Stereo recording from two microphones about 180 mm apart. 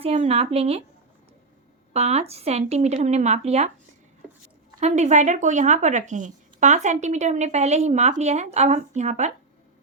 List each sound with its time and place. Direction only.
0.0 s speech: 35° right (ahead or behind)
1.9 s speech: 35° right (ahead or behind)
4.8 s speech: 40° right (ahead or behind)